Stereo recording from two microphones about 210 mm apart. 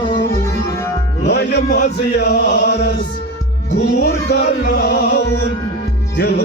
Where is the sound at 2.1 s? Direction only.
55° left (ahead or behind).